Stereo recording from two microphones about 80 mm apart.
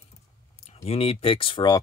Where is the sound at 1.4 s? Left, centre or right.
Left.